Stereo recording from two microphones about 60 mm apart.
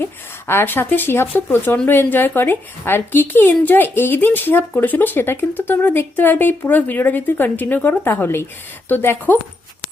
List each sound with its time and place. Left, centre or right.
0.0 s a woman's voice: left